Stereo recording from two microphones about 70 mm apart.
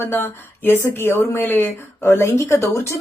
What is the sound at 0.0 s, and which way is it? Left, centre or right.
Speech, left.